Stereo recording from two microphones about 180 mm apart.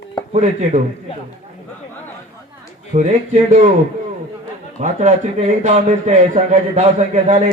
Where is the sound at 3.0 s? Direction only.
40° right (ahead or behind).